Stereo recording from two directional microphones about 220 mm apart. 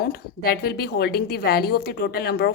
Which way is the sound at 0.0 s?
45° left (ahead or behind).